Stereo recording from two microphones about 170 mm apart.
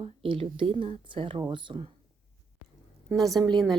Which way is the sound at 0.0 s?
30° right (ahead or behind).